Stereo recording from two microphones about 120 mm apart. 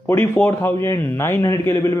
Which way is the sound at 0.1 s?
20° left (ahead or behind).